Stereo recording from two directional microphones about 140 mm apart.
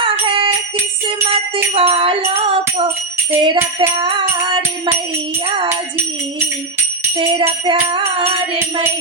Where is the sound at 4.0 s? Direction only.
35° right (ahead or behind).